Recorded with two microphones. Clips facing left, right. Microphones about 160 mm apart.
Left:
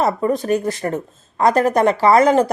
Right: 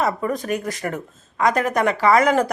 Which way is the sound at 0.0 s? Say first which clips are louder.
Left 4 dB; 30° left (ahead or behind).